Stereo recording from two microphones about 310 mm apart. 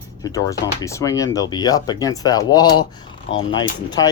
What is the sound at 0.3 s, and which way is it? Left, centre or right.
Speech, centre.